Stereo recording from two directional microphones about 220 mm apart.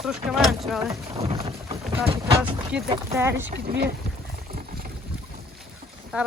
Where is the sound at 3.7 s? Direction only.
45° right (ahead or behind).